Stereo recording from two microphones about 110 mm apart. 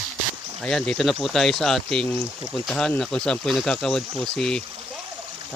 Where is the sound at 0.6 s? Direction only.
5° left (ahead or behind).